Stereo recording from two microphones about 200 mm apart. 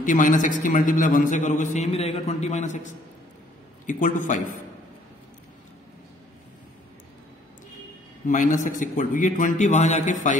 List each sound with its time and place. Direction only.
0.0 s a man's voice: 40° left (ahead or behind)
8.3 s a man's voice: 40° left (ahead or behind)